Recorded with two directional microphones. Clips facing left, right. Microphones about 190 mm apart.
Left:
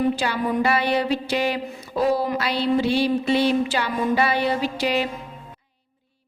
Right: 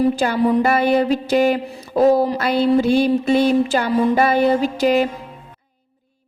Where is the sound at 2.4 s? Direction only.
50° right (ahead or behind).